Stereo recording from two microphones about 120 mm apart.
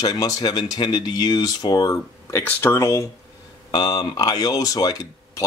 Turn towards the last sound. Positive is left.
turn(degrees=30)  # may be behind; listen again after turning